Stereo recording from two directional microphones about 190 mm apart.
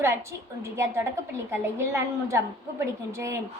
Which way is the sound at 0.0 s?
15° right (ahead or behind).